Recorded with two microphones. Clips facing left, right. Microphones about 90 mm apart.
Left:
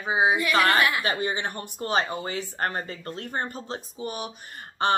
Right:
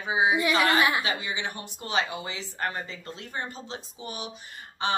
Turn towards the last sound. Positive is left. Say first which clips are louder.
# left 4 dB
turn(degrees=50)  # may be behind; listen again after turning